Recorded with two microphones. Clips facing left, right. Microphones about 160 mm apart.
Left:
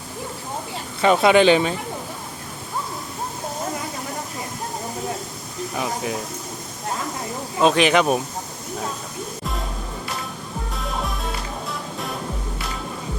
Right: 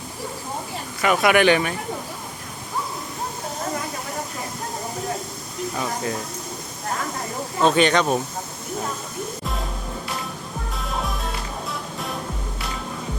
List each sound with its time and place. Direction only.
1.0 s speech: 25° left (ahead or behind)
5.7 s speech: 15° left (ahead or behind)
7.6 s speech: 5° left (ahead or behind)
10.8 s music: centre (ahead or behind)